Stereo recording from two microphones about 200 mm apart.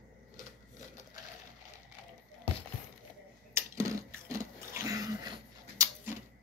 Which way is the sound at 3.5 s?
15° right (ahead or behind).